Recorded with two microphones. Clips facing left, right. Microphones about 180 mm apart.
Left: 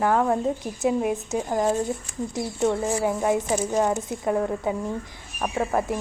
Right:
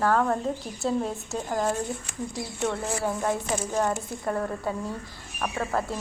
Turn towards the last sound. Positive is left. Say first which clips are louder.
# left 4 dB
turn(degrees=15)  # may be behind; listen again after turning